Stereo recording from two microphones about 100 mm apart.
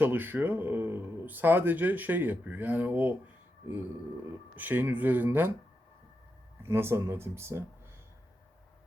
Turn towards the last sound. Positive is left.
turn(degrees=-25)  # may be behind; listen again after turning